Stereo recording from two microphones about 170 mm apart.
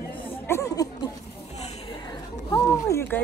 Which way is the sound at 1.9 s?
25° left (ahead or behind).